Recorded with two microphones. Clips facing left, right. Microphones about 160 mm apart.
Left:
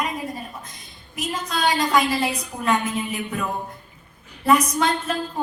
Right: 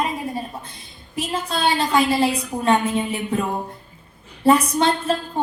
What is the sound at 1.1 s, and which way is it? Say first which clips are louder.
A woman's voice: right 2 dB; 30° right (ahead or behind).